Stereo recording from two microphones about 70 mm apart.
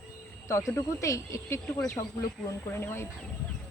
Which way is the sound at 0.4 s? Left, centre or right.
Left.